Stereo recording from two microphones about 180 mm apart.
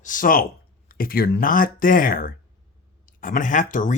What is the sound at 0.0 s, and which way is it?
Speech, 50° left (ahead or behind).